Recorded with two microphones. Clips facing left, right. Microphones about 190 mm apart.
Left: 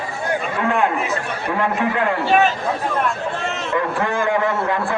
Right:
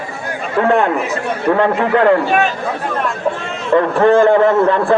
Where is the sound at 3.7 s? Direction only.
60° right (ahead or behind).